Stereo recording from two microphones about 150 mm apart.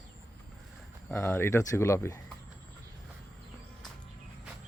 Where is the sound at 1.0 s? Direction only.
15° left (ahead or behind).